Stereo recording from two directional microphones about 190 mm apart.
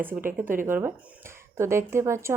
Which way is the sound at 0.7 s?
10° right (ahead or behind).